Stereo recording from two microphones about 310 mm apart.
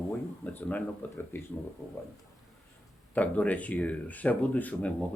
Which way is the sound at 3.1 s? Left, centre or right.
Centre.